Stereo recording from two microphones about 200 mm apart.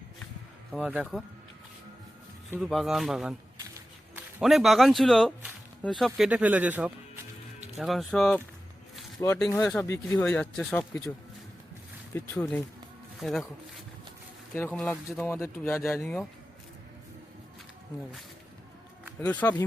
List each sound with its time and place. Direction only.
0.7 s speech: 5° right (ahead or behind)
2.6 s speech: centre (ahead or behind)
12.1 s speech: 5° left (ahead or behind)
14.5 s speech: 10° left (ahead or behind)
19.2 s speech: 10° left (ahead or behind)